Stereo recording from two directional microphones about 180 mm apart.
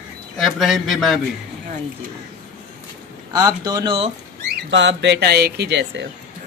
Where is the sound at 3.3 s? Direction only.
20° right (ahead or behind).